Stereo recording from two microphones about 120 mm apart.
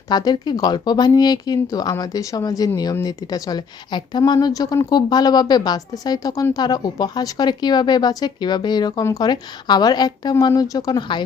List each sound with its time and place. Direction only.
0.1 s a woman's voice: 35° left (ahead or behind)